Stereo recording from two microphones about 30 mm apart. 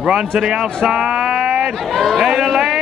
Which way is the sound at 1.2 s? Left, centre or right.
Centre.